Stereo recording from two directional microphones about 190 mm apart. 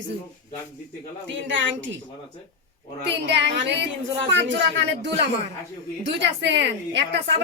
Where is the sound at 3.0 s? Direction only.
65° right (ahead or behind).